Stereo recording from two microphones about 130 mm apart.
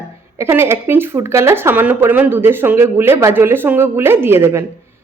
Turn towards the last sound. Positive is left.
turn(degrees=-20)  # may be behind; listen again after turning